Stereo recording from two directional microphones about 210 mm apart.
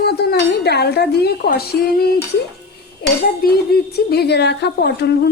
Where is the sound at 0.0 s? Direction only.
50° left (ahead or behind).